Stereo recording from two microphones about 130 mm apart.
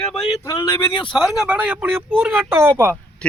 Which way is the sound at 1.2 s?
5° right (ahead or behind).